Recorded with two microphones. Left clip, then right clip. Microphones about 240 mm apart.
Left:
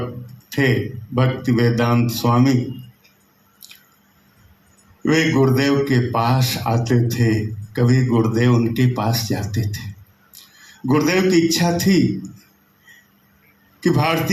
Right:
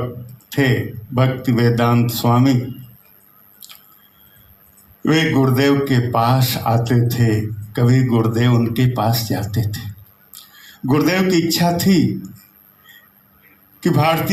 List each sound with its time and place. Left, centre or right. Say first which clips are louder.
0.5 s a sound: right 1 dB; right
1.1 s a man's voice: right 1 dB; right
3.6 s squish: right 2 dB; right
5.0 s a man's voice: even; right
10.8 s a man's voice: even; right
13.7 s a man's voice: right 2 dB; right